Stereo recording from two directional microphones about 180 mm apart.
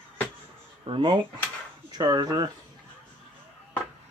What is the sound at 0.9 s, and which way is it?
Speech, 30° right (ahead or behind).